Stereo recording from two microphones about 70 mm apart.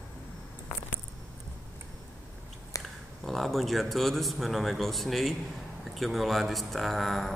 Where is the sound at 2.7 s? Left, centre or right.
Left.